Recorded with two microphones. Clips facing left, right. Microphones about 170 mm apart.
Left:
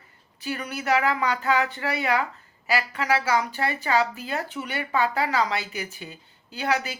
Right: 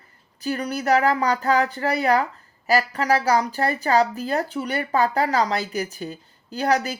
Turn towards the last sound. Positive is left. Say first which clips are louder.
# right 5 dB
turn(degrees=-40)  # may be behind; listen again after turning